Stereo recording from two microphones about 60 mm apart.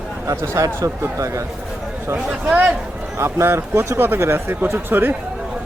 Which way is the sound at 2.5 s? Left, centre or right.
Right.